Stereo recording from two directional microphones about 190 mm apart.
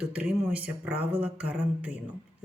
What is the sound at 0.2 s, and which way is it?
Speech, 5° right (ahead or behind).